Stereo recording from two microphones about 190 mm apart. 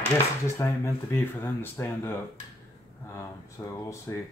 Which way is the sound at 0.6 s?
15° left (ahead or behind).